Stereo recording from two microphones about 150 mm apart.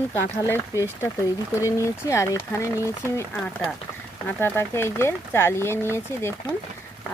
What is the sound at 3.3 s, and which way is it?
Speech, 5° left (ahead or behind).